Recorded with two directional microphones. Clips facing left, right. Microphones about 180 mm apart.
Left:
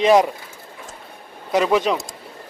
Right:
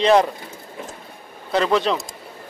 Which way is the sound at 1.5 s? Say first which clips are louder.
Left 1 dB; 10° left (ahead or behind).